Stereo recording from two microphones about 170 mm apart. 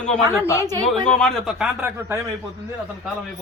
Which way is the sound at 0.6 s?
20° right (ahead or behind).